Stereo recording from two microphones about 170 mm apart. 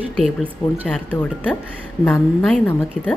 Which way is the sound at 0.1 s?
Centre (ahead or behind).